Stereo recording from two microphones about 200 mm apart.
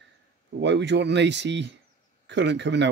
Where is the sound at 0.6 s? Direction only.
60° right (ahead or behind).